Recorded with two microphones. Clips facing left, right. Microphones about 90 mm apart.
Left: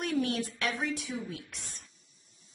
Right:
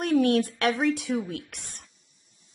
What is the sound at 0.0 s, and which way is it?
Speech, 60° right (ahead or behind).